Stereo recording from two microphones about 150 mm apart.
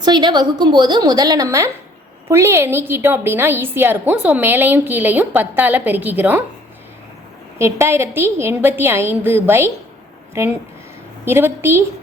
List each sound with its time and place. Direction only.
0.0 s a woman's voice: 30° right (ahead or behind); by 6.4 s 10° right (ahead or behind)
7.6 s a woman's voice: 15° right (ahead or behind)